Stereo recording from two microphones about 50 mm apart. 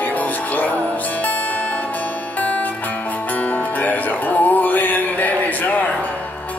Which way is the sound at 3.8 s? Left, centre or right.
Left.